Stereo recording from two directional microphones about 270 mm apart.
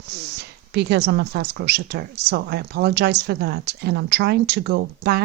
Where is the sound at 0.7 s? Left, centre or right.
Right.